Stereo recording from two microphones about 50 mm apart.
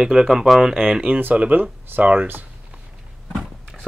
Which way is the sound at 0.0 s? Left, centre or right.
Centre.